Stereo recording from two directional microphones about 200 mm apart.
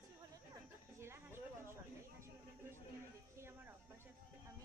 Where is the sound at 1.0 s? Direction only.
10° right (ahead or behind).